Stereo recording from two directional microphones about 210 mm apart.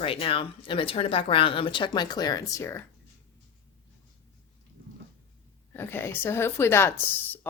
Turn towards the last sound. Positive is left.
turn(degrees=10)  # may be behind; listen again after turning